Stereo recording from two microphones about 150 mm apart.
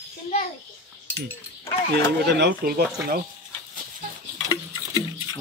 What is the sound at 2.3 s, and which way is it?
Speech, 85° right.